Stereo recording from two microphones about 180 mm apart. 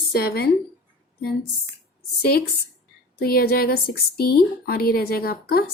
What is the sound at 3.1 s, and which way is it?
Speech, 60° left (ahead or behind).